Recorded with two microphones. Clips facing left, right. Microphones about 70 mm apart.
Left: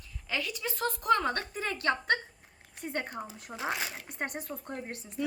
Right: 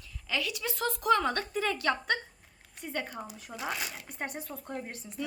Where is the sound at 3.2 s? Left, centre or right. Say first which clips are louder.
Left 2 dB; left.